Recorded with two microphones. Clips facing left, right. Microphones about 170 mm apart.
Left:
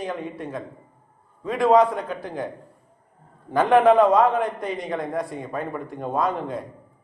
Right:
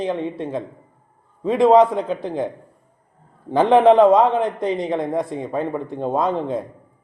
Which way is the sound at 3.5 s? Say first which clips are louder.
Right 3 dB; 25° right (ahead or behind).